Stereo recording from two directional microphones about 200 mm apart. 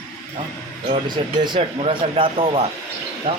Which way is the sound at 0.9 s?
20° right (ahead or behind).